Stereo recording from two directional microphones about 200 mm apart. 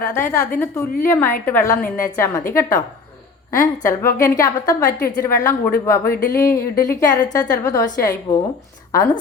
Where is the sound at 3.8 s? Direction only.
15° left (ahead or behind).